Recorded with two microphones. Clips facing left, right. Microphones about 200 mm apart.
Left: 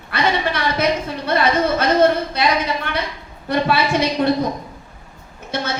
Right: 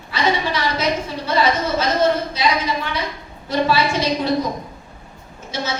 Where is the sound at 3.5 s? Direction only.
60° left (ahead or behind).